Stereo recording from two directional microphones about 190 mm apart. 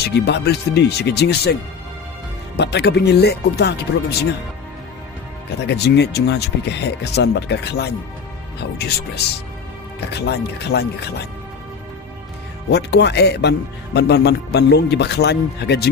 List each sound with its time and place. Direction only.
0.0 s a man's voice: 60° left (ahead or behind)
2.6 s a man's voice: 60° left (ahead or behind)
5.6 s a man's voice: 60° left (ahead or behind)
12.7 s a man's voice: 60° left (ahead or behind)